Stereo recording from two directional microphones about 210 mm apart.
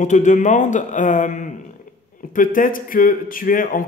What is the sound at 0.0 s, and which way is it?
A man's voice, 35° left (ahead or behind).